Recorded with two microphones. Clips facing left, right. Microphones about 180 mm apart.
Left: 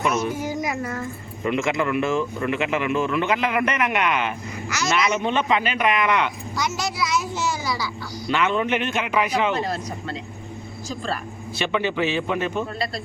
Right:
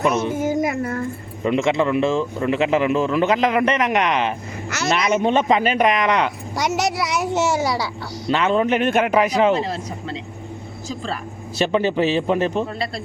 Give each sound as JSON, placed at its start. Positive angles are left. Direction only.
{"t": 0.0, "sound": "a man's voice", "side_deg": -30}
{"t": 0.3, "sound": "a sound", "side_deg": -50}
{"t": 1.5, "sound": "a man's voice", "side_deg": -30}
{"t": 6.6, "sound": "a child's voice", "side_deg": -75}
{"t": 8.3, "sound": "a man's voice", "side_deg": -35}
{"t": 11.5, "sound": "a man's voice", "side_deg": -40}